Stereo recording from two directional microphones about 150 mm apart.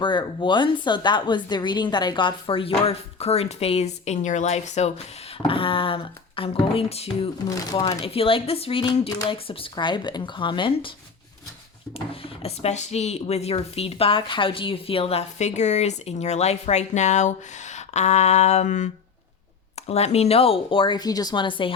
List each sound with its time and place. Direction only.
0.0 s speech: 30° left (ahead or behind); by 4.9 s 50° left (ahead or behind)
5.4 s speech: 35° left (ahead or behind)
7.5 s speech: 25° left (ahead or behind)
7.9 s speech: 40° left (ahead or behind)
8.9 s speech: 25° left (ahead or behind)
11.9 s speech: 40° left (ahead or behind)
19.9 s speech: 45° left (ahead or behind)